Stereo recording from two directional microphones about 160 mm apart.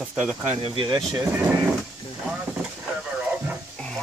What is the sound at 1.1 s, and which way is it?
Speech, 10° right (ahead or behind).